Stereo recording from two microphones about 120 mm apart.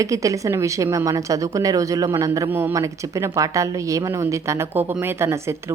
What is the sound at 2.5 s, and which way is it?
Speech, 15° right (ahead or behind).